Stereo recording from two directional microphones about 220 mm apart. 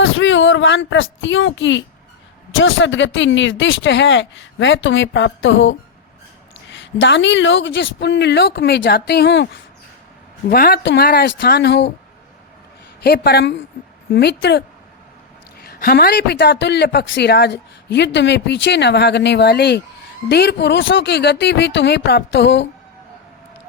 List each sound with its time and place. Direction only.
0.0 s speech: 60° left (ahead or behind)
10.5 s speech: 45° left (ahead or behind)
13.0 s speech: 45° left (ahead or behind)
15.6 s speech: 45° left (ahead or behind)